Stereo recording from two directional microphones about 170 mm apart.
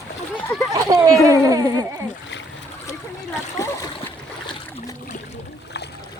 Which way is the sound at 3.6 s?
15° left (ahead or behind).